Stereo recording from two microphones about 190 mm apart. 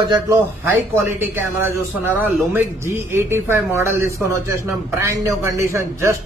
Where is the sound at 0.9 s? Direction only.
10° right (ahead or behind).